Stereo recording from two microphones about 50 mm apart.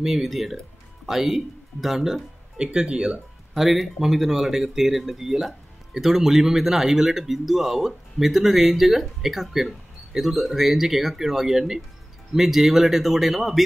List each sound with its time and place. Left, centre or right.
0.0 s speech: centre
3.5 s speech: centre